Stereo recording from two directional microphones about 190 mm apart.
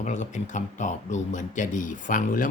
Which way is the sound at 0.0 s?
40° left (ahead or behind).